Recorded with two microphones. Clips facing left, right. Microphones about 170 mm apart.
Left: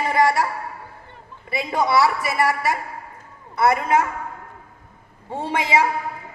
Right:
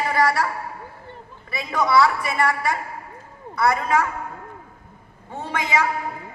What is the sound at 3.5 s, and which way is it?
Speech, 25° left (ahead or behind).